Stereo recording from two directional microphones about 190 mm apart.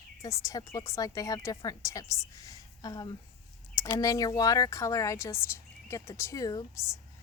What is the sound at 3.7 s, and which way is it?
Speech, 20° left (ahead or behind).